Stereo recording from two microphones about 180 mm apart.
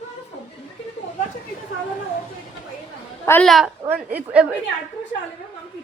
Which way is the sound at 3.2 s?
10° left (ahead or behind).